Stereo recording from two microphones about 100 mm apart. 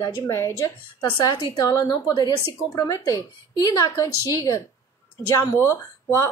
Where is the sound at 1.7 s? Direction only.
35° left (ahead or behind).